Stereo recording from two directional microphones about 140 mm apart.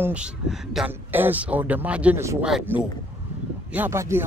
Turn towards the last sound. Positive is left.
turn(degrees=-20)  # may be behind; listen again after turning